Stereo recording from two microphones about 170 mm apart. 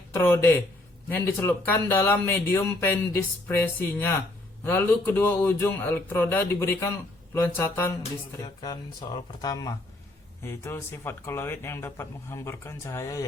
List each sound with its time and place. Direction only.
0.1 s speech: 15° left (ahead or behind)